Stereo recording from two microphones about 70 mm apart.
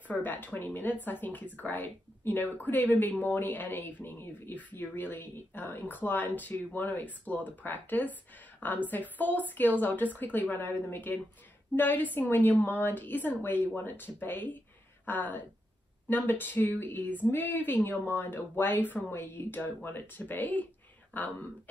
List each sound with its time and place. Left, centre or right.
0.1 s speech: left